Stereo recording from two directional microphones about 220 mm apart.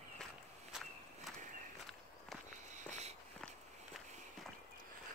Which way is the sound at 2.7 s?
35° right (ahead or behind).